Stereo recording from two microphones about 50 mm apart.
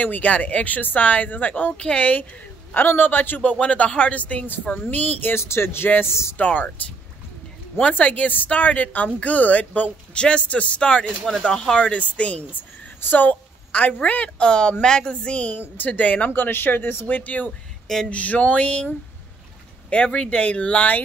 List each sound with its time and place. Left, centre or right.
0.0 s speech: left
2.7 s speech: left
3.4 s a woman's voice: left
5.2 s speech: left
6.3 s speech: left
7.9 s speech: left
10.1 s a woman's voice: left
11.8 s a woman's voice: left
13.0 s speech: left
13.7 s a woman's voice: left
16.3 s speech: left
17.5 s a sound: centre
18.1 s a woman's voice: left
19.9 s a woman's voice: left